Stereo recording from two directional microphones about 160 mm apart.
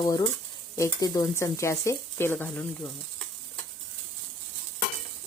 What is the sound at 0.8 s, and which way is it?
Speech, 25° left (ahead or behind).